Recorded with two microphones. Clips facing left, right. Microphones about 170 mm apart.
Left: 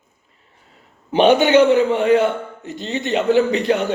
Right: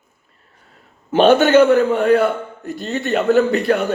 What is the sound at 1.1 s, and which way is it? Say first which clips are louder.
A man's voice: right 1 dB; 15° left (ahead or behind).